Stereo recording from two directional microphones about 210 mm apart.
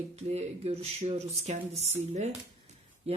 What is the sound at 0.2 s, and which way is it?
Speech, 30° right (ahead or behind).